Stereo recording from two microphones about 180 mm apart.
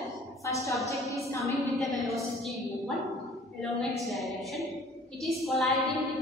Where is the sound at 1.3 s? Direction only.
15° left (ahead or behind).